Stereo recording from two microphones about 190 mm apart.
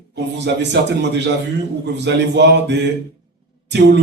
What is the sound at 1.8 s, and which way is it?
A man's voice, 65° right (ahead or behind).